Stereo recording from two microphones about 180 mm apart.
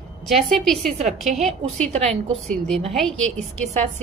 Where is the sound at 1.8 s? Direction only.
40° right (ahead or behind).